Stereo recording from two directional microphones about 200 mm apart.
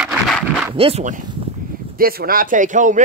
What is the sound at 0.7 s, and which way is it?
Speech, 30° right (ahead or behind).